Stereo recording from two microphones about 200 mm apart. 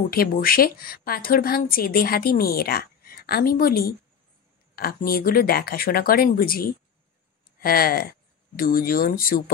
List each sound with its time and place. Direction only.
0.1 s a woman's voice: 45° left (ahead or behind)